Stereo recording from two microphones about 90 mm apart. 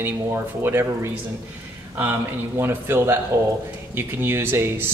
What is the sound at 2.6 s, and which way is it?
Speech, 25° right (ahead or behind).